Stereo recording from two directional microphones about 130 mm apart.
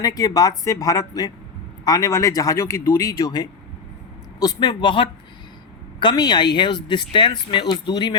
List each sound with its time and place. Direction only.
0.0 s a man's voice: 30° left (ahead or behind)